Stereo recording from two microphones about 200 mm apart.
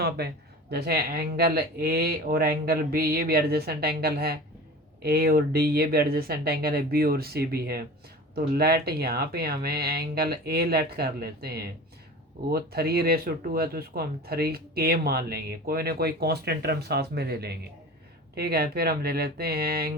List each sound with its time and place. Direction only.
0.2 s speech: 50° right (ahead or behind)